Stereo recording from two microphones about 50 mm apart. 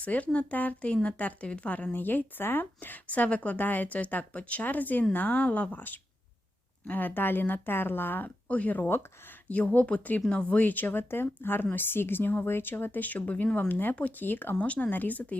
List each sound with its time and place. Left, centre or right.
0.0 s speech: left
1.9 s speech: left
3.1 s speech: left
5.7 s speech: left
8.4 s speech: left
10.6 s speech: left
13.7 s speech: left
14.6 s speech: left